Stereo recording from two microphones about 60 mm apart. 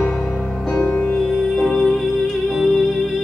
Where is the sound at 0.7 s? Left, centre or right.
Left.